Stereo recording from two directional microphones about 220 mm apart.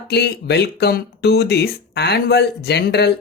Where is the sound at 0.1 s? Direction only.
50° left (ahead or behind).